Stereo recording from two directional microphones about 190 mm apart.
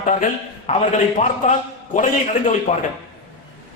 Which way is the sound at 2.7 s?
35° left (ahead or behind).